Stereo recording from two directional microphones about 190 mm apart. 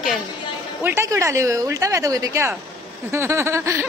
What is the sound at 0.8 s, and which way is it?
Speech, 15° right (ahead or behind).